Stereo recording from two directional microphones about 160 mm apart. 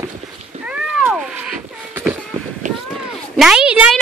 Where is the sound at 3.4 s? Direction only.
5° right (ahead or behind).